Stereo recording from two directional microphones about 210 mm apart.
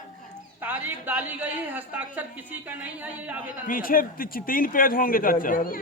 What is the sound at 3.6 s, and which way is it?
A man's voice, 40° left (ahead or behind).